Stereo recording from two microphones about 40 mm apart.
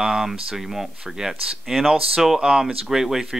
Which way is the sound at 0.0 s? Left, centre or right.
Centre.